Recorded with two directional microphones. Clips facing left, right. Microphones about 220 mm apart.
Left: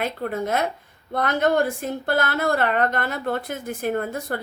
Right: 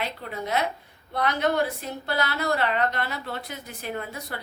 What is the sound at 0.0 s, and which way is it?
A woman's voice, 50° left (ahead or behind).